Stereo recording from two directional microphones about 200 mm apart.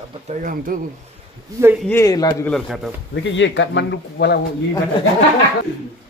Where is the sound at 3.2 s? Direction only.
65° left (ahead or behind).